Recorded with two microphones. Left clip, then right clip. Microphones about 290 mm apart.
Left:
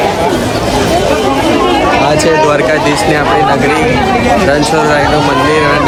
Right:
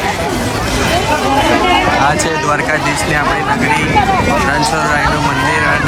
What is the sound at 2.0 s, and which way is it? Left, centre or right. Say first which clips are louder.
Speech: left 5 dB; centre.